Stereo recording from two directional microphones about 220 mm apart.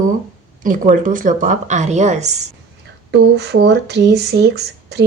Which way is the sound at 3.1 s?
50° right (ahead or behind).